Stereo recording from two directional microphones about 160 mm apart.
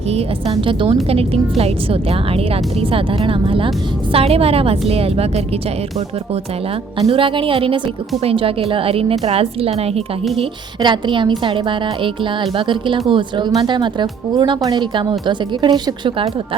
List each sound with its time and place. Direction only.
0.1 s a woman's voice: 40° right (ahead or behind)
7.0 s a woman's voice: 35° right (ahead or behind)
10.8 s a woman's voice: 30° right (ahead or behind)